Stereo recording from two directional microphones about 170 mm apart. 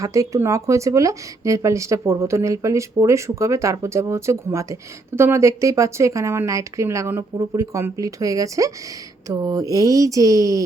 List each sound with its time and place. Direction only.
0.0 s speech: 20° right (ahead or behind)